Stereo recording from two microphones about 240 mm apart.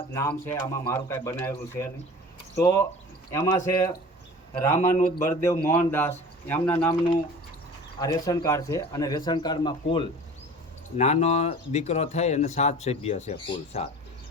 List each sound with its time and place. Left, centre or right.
0.1 s a man's voice: centre
3.3 s a man's voice: centre
7.9 s a man's voice: centre